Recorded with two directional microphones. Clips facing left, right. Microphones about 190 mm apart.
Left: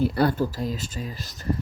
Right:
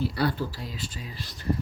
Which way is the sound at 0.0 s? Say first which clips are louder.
Left 5 dB; 50° left (ahead or behind).